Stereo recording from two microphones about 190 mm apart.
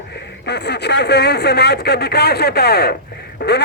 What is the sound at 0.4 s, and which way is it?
A man's voice, 60° left (ahead or behind).